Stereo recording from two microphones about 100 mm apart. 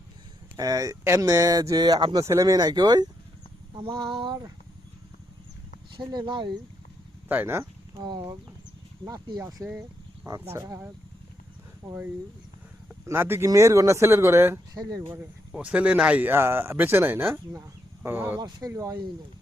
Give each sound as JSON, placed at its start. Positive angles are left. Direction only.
{"t": 0.5, "sound": "speech", "side_deg": -40}
{"t": 3.8, "sound": "a sound", "side_deg": -60}
{"t": 6.0, "sound": "speech", "side_deg": -50}
{"t": 7.3, "sound": "speech", "side_deg": -20}
{"t": 8.0, "sound": "speech", "side_deg": -45}
{"t": 9.6, "sound": "speech", "side_deg": -30}
{"t": 11.8, "sound": "speech", "side_deg": -45}
{"t": 13.1, "sound": "speech", "side_deg": -25}
{"t": 14.7, "sound": "speech", "side_deg": -40}
{"t": 15.2, "sound": "speech", "side_deg": -15}
{"t": 18.3, "sound": "speech", "side_deg": -45}